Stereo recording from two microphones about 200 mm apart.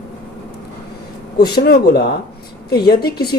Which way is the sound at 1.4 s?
50° left (ahead or behind).